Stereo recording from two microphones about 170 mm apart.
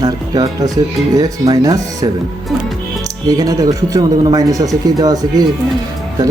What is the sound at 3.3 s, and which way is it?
Speech, 20° right (ahead or behind).